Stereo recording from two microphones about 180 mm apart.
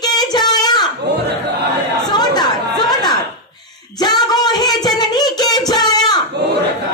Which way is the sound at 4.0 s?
20° left (ahead or behind).